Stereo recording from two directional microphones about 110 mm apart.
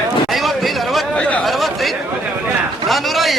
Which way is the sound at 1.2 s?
10° left (ahead or behind).